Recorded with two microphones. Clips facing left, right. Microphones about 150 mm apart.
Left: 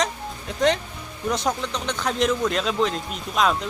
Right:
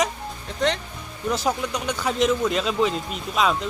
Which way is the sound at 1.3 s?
5° right (ahead or behind).